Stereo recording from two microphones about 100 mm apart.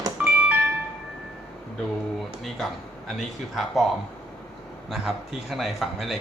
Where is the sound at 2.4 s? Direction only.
5° left (ahead or behind).